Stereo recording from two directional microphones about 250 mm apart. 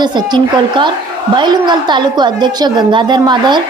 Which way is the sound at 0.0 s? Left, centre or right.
Centre.